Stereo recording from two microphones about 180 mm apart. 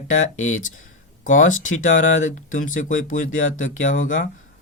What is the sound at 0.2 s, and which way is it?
Speech, 45° left (ahead or behind).